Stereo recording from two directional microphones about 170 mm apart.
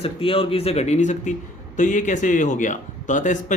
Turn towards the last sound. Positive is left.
turn(degrees=45)  # may be behind; listen again after turning